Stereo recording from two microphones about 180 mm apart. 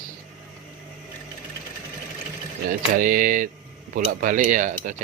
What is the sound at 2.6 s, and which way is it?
A man's voice, 55° right (ahead or behind).